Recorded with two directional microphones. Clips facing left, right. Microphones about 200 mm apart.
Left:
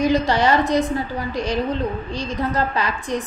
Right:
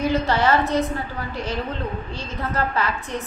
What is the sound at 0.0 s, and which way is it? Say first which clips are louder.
A woman's voice: left 3 dB; 15° left (ahead or behind).